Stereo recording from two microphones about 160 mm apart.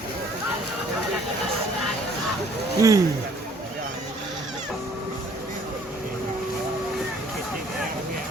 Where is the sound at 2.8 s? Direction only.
20° right (ahead or behind).